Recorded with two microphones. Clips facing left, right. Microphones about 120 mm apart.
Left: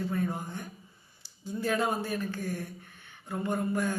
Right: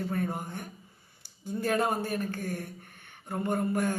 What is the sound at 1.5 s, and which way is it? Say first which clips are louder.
Speech: right 1 dB; 50° right (ahead or behind).